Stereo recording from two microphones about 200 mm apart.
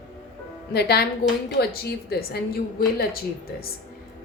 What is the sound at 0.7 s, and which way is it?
A woman's voice, 50° left (ahead or behind).